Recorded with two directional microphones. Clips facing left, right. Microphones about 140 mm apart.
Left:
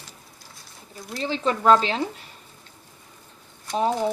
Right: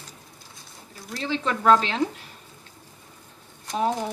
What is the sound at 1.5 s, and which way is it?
Speech, 30° left (ahead or behind).